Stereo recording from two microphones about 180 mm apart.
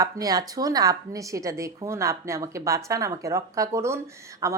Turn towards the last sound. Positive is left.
turn(degrees=-15)  # may be behind; listen again after turning